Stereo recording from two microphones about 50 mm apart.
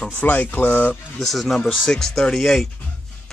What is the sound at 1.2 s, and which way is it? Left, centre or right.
Speech, centre.